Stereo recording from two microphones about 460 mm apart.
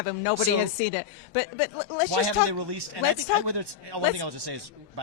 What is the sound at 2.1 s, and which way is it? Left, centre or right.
Speech, right.